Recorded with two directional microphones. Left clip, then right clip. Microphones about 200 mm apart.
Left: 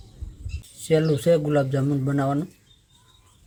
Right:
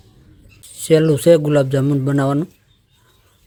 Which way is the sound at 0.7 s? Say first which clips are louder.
Right 7 dB; 50° right (ahead or behind).